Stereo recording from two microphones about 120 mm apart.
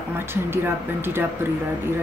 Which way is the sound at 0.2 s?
20° right (ahead or behind).